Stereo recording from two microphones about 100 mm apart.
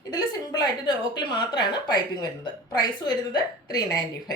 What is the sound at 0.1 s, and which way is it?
Speech, 40° left (ahead or behind).